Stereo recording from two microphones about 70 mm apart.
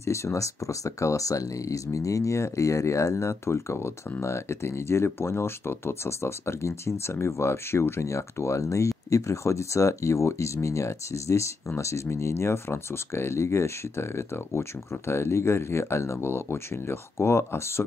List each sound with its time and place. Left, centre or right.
0.0 s speech: left